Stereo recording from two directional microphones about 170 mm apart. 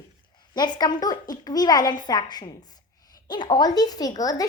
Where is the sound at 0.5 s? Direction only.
25° left (ahead or behind).